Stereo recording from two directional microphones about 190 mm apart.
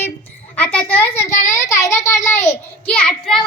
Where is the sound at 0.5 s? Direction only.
5° left (ahead or behind).